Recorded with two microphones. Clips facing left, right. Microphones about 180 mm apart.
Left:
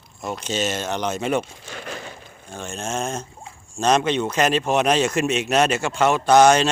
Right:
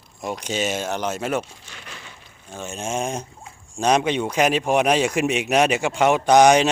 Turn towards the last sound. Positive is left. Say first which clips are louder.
# even
turn(degrees=-15)  # may be behind; listen again after turning